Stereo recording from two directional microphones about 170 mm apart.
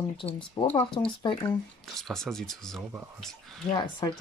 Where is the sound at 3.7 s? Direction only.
25° left (ahead or behind).